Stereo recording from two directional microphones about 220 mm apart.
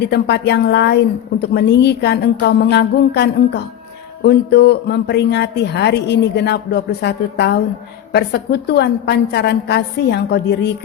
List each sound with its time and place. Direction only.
0.1 s a woman's voice: 50° left (ahead or behind)